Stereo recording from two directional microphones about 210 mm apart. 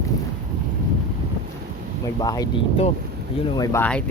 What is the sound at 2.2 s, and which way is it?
Speech, 20° left (ahead or behind).